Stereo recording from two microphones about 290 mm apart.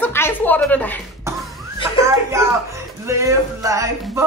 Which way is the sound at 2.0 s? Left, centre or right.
Centre.